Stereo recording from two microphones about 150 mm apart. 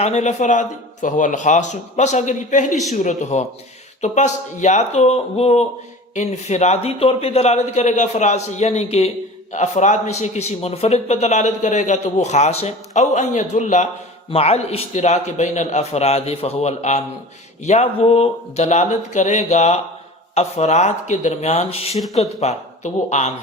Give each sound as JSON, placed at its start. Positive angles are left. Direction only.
{"t": 0.0, "sound": "a man's voice", "side_deg": 50}